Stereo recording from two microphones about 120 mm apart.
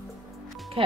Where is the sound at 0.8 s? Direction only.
45° right (ahead or behind).